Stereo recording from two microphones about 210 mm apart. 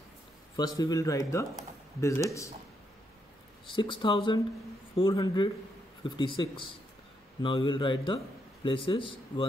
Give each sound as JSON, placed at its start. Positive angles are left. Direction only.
{"t": 0.7, "sound": "speech", "side_deg": 15}
{"t": 3.7, "sound": "a man's voice", "side_deg": 25}